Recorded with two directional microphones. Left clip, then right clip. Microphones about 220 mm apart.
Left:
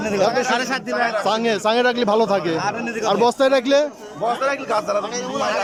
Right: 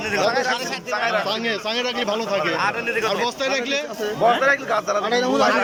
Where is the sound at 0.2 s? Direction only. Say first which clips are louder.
Left 3 dB; 10° left (ahead or behind).